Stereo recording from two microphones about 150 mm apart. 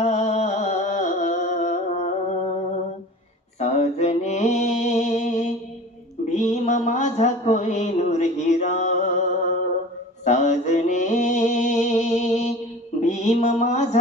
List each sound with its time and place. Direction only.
0.0 s music: 50° left (ahead or behind)
3.5 s mantra: 50° left (ahead or behind)
10.2 s mantra: 50° left (ahead or behind)